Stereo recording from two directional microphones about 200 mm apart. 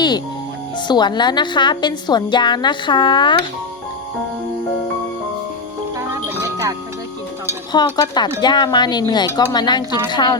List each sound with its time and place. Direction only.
0.8 s a woman's voice: 20° left (ahead or behind)
6.2 s music: 15° right (ahead or behind)
7.9 s a woman's voice: 20° left (ahead or behind)